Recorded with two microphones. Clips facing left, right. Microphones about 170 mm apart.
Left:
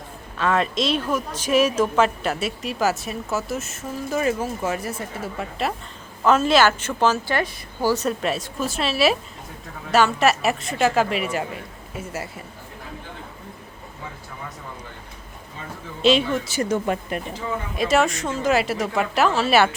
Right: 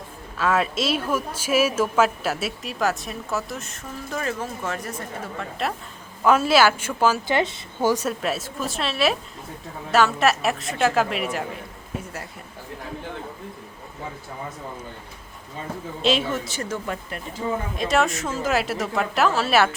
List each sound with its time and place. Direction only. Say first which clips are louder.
0.3 s a woman's voice: left 1 dB; 5° right (ahead or behind)
6.2 s a woman's voice: even; 10° right (ahead or behind)
8.0 s a woman's voice: left 2 dB; centre (ahead or behind)
16.0 s a woman's voice: left 4 dB; centre (ahead or behind)
16.6 s speech: left 6 dB; 20° left (ahead or behind)
17.7 s a woman's voice: left 4 dB; centre (ahead or behind)